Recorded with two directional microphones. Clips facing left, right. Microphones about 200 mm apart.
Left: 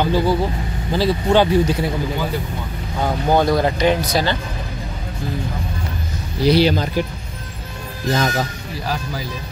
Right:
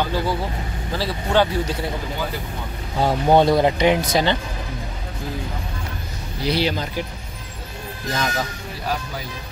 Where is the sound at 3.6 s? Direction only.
15° right (ahead or behind).